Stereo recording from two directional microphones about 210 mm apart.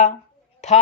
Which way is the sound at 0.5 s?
35° left (ahead or behind).